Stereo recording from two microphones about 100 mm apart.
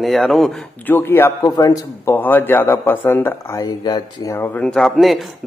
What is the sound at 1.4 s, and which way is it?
Speech, 40° left (ahead or behind).